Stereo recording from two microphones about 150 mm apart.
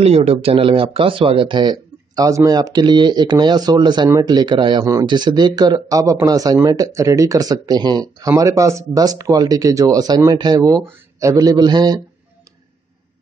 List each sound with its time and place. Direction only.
0.0 s speech: 45° right (ahead or behind); by 12.0 s 25° right (ahead or behind)